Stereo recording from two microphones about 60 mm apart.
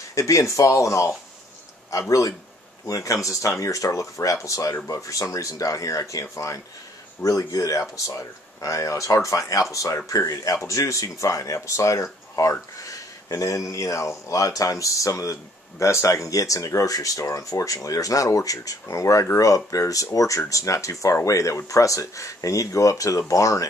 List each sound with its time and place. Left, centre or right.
0.1 s speech: left
7.2 s speech: left
10.6 s speech: left
19.3 s speech: left